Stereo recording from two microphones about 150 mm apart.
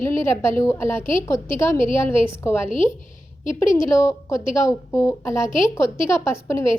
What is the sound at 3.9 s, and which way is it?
A woman's voice, 20° left (ahead or behind).